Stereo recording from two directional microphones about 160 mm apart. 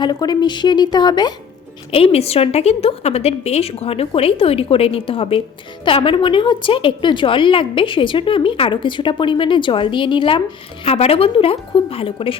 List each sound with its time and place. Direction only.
0.0 s speech: 25° left (ahead or behind)
1.9 s a woman's voice: 40° left (ahead or behind)